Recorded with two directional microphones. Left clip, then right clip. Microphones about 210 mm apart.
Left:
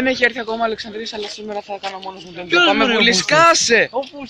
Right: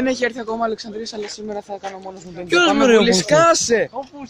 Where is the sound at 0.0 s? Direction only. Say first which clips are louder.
Left 4 dB; 5° right (ahead or behind).